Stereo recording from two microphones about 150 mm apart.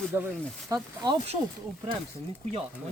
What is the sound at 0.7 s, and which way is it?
Speech, 30° right (ahead or behind).